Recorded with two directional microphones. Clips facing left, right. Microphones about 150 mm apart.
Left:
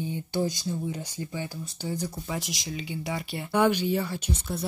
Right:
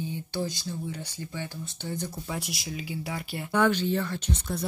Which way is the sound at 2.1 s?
Centre (ahead or behind).